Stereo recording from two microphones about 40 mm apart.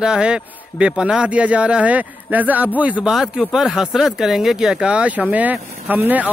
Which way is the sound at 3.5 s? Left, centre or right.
Centre.